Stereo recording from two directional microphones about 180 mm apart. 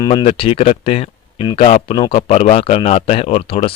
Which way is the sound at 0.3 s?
30° left (ahead or behind).